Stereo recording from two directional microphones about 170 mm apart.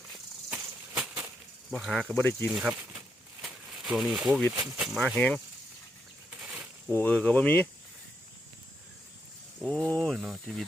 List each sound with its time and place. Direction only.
0.5 s a sound: 5° right (ahead or behind)
1.7 s speech: centre (ahead or behind)
3.4 s a sound: centre (ahead or behind)
4.6 s speech: centre (ahead or behind)
6.9 s speech: 10° left (ahead or behind)
9.6 s speech: 5° left (ahead or behind)